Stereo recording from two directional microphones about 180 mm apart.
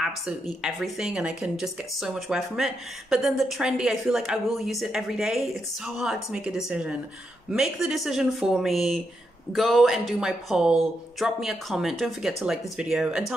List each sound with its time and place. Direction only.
0.6 s speech: 5° right (ahead or behind)